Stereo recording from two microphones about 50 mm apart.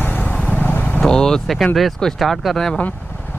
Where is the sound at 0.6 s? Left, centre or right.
Left.